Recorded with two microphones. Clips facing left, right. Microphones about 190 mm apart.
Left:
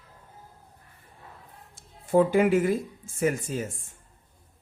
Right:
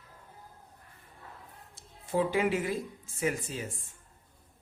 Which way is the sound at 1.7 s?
50° left (ahead or behind).